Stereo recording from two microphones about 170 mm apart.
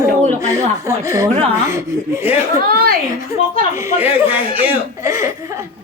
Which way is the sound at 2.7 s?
60° right (ahead or behind).